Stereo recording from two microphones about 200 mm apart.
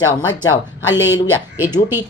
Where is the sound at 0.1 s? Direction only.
20° left (ahead or behind).